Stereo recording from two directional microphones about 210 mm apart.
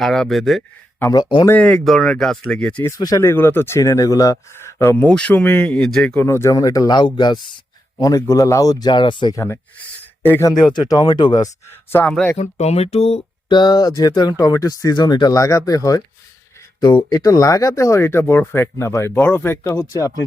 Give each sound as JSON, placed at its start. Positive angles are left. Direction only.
{"t": 0.0, "sound": "a man's voice", "side_deg": 0}
{"t": 1.0, "sound": "speech", "side_deg": 20}
{"t": 1.5, "sound": "speech", "side_deg": 5}
{"t": 12.4, "sound": "speech", "side_deg": 30}